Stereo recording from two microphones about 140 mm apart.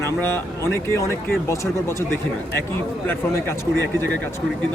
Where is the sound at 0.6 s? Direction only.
20° left (ahead or behind).